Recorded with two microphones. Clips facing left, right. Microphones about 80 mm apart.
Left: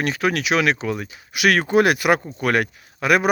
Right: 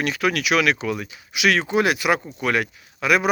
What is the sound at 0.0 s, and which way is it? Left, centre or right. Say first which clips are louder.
Speech: left 1 dB; left.